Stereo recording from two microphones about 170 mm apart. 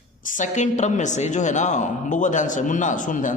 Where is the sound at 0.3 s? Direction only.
45° left (ahead or behind).